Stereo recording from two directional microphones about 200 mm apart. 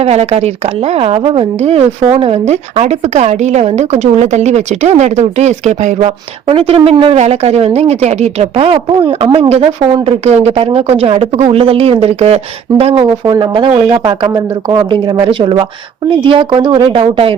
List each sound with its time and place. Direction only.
0.0 s a woman's voice: 30° right (ahead or behind)